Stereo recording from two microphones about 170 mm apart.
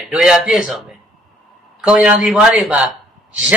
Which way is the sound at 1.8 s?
5° right (ahead or behind).